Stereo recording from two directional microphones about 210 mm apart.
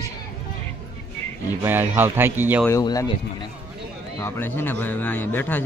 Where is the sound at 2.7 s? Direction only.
15° left (ahead or behind).